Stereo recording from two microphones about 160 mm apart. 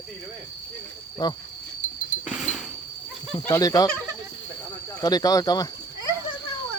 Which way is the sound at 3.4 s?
20° left (ahead or behind).